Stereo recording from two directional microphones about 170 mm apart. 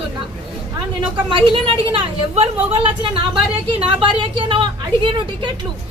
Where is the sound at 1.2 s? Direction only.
30° right (ahead or behind).